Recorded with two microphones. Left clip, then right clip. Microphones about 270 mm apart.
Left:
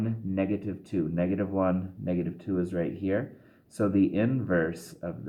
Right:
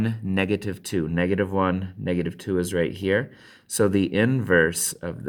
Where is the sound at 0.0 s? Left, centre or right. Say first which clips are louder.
Right 5 dB; right.